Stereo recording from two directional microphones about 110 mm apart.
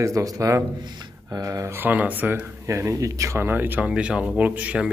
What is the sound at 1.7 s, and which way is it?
Speech, 15° right (ahead or behind).